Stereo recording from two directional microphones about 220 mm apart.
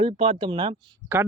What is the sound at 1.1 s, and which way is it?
Speech, 10° right (ahead or behind).